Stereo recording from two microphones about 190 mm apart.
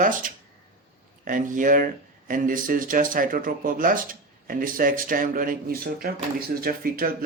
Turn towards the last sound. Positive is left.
turn(degrees=-50)  # may be behind; listen again after turning